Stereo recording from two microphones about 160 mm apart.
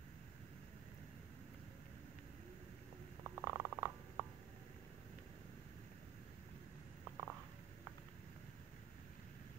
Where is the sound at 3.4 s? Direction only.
15° right (ahead or behind).